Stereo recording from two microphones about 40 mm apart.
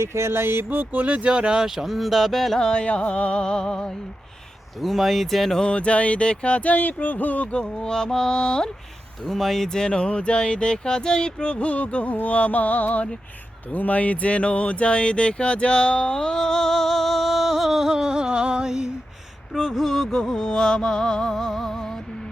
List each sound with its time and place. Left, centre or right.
0.1 s a sound: right
1.0 s speech: right; by 2.6 s centre
2.6 s speech: left
4.8 s speech: centre
5.6 s speech: left
7.5 s speech: left
9.2 s speech: centre
9.6 s speech: centre
16.1 s music: centre
19.5 s music: centre